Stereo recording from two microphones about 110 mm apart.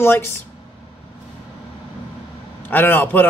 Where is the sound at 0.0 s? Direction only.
20° left (ahead or behind).